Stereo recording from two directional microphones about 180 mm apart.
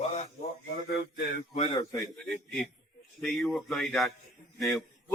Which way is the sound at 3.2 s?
Centre (ahead or behind).